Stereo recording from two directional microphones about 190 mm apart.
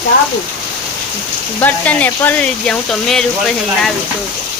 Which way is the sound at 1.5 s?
10° left (ahead or behind).